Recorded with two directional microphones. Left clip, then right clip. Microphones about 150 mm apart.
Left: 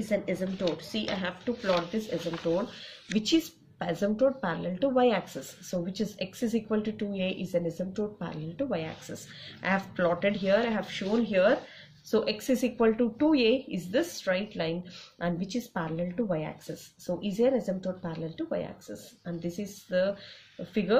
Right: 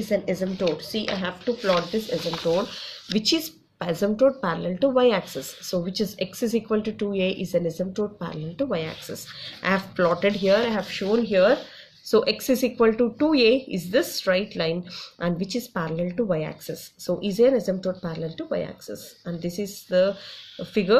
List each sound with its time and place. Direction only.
0.1 s speech: 20° right (ahead or behind)